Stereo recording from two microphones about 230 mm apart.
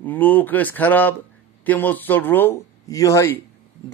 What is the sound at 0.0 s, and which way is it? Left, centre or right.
Speech, centre.